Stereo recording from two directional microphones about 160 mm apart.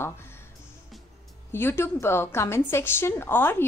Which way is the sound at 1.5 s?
15° left (ahead or behind).